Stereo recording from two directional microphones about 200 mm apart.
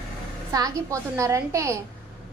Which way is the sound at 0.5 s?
15° right (ahead or behind).